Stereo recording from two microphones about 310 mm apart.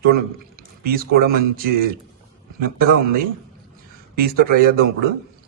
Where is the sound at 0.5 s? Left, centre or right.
Right.